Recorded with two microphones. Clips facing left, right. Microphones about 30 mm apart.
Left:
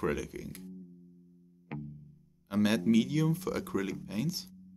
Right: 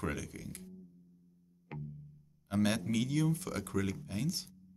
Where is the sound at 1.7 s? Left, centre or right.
Centre.